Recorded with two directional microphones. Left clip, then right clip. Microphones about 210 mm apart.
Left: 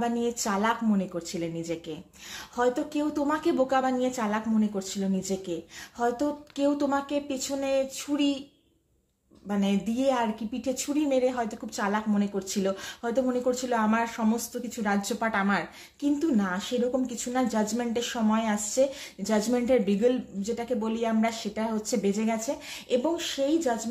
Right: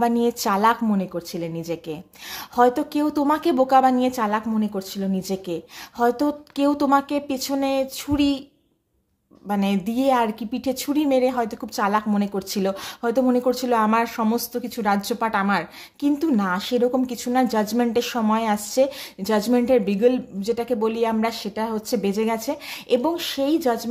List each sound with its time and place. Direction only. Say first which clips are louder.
0.0 s speech: right 8 dB; 40° right (ahead or behind)
2.5 s speech: right 8 dB; 40° right (ahead or behind)
9.5 s speech: right 5 dB; 40° right (ahead or behind)